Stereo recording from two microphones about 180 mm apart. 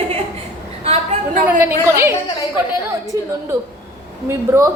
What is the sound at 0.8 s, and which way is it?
Speech, 35° right (ahead or behind).